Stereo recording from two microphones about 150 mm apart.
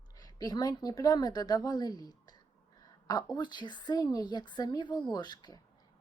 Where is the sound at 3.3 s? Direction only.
30° left (ahead or behind).